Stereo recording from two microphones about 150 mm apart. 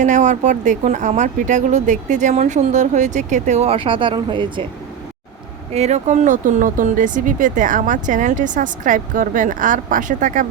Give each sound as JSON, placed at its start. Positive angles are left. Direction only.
{"t": 0.0, "sound": "speech", "side_deg": -55}
{"t": 5.7, "sound": "speech", "side_deg": -50}